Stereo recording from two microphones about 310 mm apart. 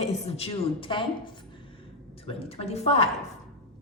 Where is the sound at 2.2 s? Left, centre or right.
Centre.